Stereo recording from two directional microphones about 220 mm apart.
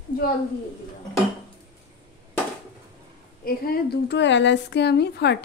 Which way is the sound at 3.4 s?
45° left (ahead or behind).